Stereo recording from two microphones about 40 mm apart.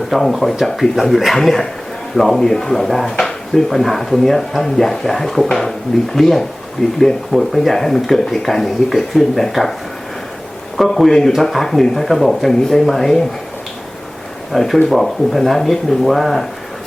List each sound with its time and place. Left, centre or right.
0.1 s speech: centre
3.1 s a sound: centre
3.5 s speech: centre
10.8 s speech: centre
14.5 s speech: centre